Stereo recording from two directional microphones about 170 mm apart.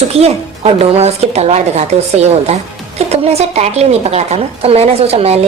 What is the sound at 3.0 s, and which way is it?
A woman's voice, 40° right (ahead or behind).